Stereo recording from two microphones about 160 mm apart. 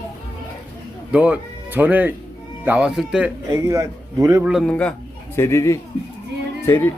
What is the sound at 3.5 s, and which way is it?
Speech, 20° right (ahead or behind).